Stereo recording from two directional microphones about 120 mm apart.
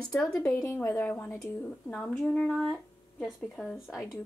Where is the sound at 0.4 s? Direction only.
25° left (ahead or behind).